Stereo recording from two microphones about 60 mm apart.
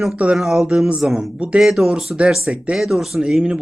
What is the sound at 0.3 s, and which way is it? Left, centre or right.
Speech, centre.